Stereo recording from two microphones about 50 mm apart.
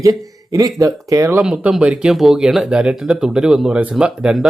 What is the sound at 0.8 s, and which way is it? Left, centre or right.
Speech, right.